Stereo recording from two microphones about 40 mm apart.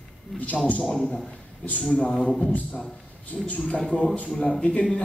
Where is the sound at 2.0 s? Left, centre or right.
Left.